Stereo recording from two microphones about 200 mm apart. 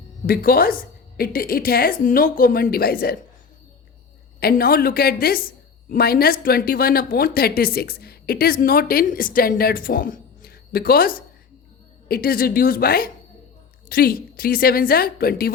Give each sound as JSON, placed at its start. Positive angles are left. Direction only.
{"t": 0.3, "sound": "speech", "side_deg": 50}
{"t": 4.4, "sound": "speech", "side_deg": 50}